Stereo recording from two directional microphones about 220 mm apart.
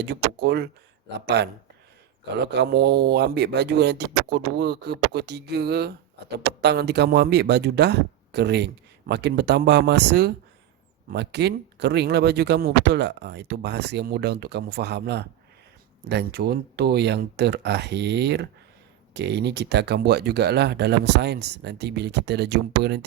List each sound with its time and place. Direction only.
0.0 s speech: 50° right (ahead or behind)